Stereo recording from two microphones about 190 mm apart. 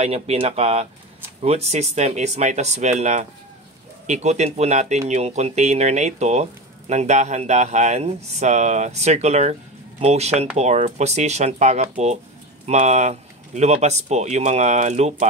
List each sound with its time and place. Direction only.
0.0 s speech: 35° right (ahead or behind)